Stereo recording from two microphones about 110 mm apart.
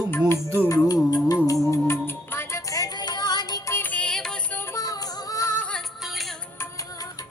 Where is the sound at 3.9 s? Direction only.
10° left (ahead or behind).